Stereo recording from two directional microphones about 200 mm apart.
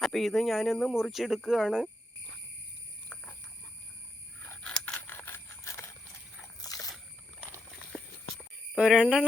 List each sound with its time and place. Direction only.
0.0 s speech: centre (ahead or behind)
4.4 s a sound: 5° left (ahead or behind)
8.7 s speech: 5° right (ahead or behind)